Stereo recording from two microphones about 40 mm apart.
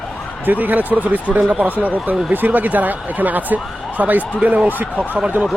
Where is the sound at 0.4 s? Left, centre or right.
Right.